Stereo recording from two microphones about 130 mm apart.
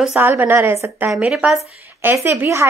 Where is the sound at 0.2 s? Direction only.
15° right (ahead or behind).